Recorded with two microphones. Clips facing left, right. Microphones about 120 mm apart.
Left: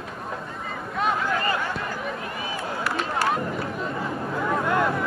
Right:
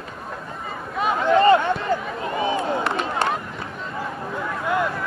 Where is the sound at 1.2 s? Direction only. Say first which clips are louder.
Right 11 dB; 25° right (ahead or behind).